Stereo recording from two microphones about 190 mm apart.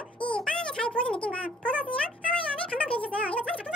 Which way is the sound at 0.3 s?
5° left (ahead or behind).